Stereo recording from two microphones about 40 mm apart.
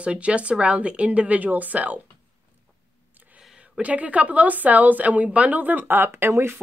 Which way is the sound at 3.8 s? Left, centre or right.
Right.